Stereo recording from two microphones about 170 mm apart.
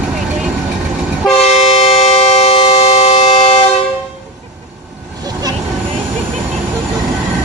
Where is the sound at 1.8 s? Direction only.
35° left (ahead or behind).